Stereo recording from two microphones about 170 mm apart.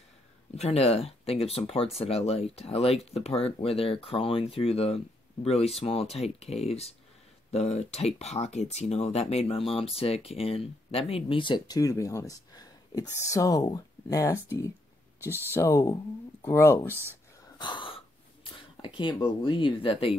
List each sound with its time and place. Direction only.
0.6 s speech: 35° left (ahead or behind); by 16.8 s 15° left (ahead or behind)
16.8 s speech: 15° right (ahead or behind)
17.6 s a sound: 25° left (ahead or behind)
19.4 s speech: 30° left (ahead or behind)